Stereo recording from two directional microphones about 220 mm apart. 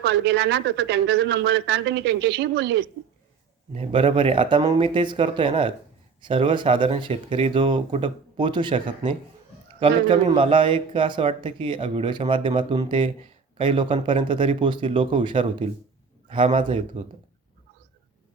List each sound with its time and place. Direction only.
0.0 s speech: 50° right (ahead or behind)
3.8 s a man's voice: 25° right (ahead or behind)